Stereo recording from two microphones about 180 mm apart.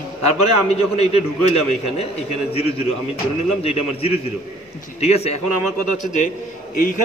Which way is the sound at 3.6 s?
35° left (ahead or behind).